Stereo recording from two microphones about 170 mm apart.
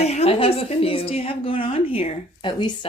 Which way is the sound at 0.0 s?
40° left (ahead or behind).